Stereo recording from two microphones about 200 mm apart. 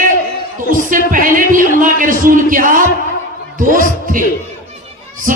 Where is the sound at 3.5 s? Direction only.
40° right (ahead or behind).